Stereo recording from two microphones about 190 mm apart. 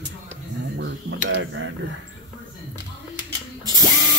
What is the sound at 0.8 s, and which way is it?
Speech, 80° right.